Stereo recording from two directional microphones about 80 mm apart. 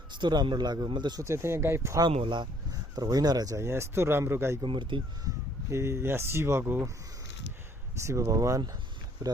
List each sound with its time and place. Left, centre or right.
0.1 s a man's voice: right
1.2 s speech: right
2.0 s speech: right
2.9 s speech: right
3.6 s speech: right
4.6 s speech: right
5.7 s speech: right
7.9 s speech: right